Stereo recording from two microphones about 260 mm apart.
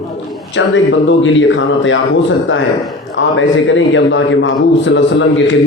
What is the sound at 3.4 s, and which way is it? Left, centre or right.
A man's voice, left.